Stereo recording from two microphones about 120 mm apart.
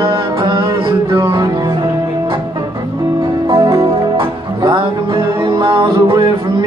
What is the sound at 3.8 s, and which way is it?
Music, 45° right (ahead or behind).